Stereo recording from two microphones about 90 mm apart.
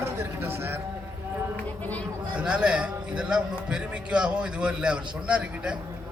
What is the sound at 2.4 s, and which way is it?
A man's voice, 10° right (ahead or behind).